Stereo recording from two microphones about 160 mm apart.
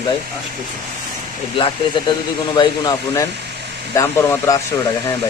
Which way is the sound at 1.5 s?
30° left (ahead or behind).